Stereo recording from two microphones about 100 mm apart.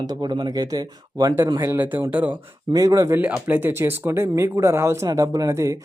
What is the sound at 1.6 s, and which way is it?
Speech, 20° right (ahead or behind).